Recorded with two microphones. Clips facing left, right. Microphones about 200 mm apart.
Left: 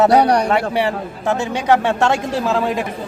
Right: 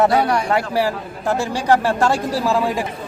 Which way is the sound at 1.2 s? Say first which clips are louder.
Left 1 dB; 20° left (ahead or behind).